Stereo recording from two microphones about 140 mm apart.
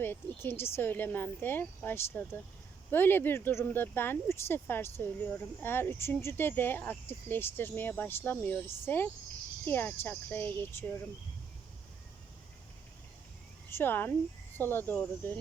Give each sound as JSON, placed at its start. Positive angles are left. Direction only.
{"t": 0.0, "sound": "speech", "side_deg": 15}
{"t": 13.7, "sound": "speech", "side_deg": 15}